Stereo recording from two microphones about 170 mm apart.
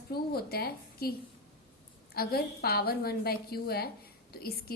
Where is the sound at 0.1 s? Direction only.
65° left (ahead or behind).